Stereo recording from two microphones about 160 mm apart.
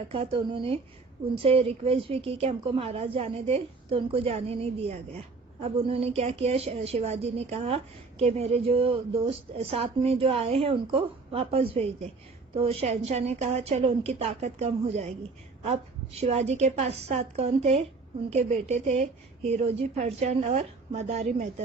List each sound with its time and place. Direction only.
0.1 s a woman's voice: 35° right (ahead or behind)